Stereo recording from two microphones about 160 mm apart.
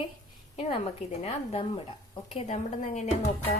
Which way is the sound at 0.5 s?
35° left (ahead or behind).